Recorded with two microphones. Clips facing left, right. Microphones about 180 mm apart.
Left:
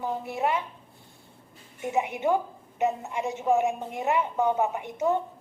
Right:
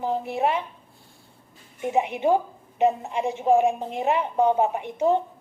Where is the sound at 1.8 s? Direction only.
30° right (ahead or behind).